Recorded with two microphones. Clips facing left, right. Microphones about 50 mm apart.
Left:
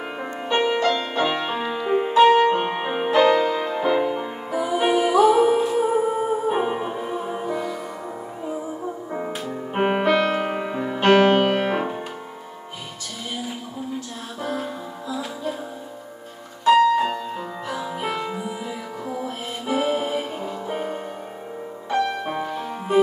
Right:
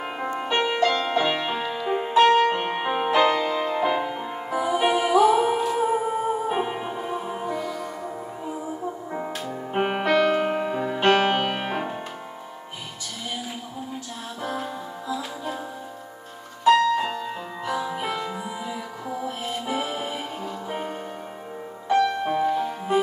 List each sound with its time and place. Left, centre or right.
0.7 s music: centre
9.1 s music: centre
14.4 s music: centre
16.6 s music: centre
18.0 s music: centre
18.4 s music: centre
19.7 s music: centre
20.2 s music: centre
22.2 s music: centre